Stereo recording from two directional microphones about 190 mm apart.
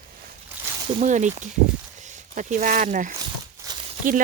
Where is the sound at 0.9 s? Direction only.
40° right (ahead or behind).